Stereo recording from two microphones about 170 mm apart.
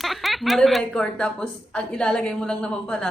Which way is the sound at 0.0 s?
Centre (ahead or behind).